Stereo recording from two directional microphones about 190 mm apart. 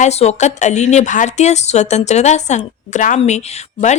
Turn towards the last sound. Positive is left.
turn(degrees=35)  # may be behind; listen again after turning